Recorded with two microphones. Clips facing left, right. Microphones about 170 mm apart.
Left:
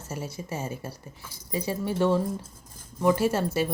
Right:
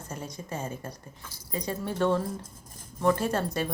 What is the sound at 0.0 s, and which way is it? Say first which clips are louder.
Speech: left 3 dB; 5° left (ahead or behind).